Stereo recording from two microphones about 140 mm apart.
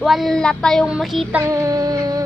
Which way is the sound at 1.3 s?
20° right (ahead or behind).